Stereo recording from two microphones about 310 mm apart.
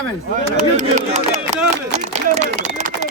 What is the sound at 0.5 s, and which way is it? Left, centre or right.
Speech, right.